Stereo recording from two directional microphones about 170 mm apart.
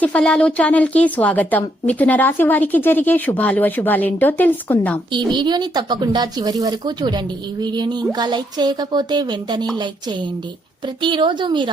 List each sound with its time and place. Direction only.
0.0 s a woman's voice: 5° left (ahead or behind)
5.1 s speech: 25° right (ahead or behind)